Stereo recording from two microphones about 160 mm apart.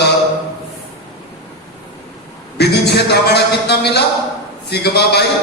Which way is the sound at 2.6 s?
90° left.